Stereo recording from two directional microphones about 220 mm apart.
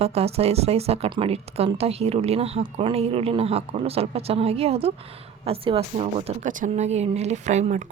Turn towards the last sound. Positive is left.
turn(degrees=-35)  # may be behind; listen again after turning